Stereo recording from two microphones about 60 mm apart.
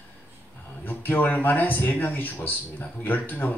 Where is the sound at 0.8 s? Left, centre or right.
Left.